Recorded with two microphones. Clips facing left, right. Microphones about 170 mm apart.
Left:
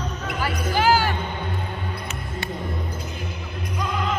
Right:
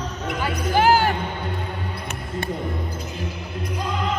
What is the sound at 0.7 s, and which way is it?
Music, 55° right (ahead or behind).